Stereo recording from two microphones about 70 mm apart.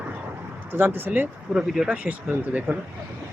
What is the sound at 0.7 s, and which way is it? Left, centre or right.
Speech, right.